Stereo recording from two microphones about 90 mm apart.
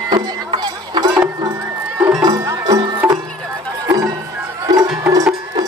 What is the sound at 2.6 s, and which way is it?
Music, 45° right (ahead or behind).